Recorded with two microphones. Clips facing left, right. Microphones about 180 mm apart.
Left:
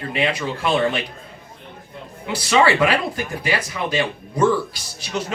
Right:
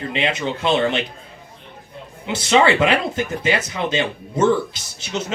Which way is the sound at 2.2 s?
25° right (ahead or behind).